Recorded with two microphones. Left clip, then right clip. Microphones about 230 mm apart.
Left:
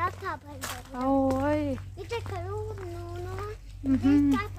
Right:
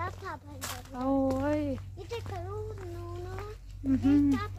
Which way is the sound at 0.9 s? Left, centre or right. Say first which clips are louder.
Left 4 dB; centre.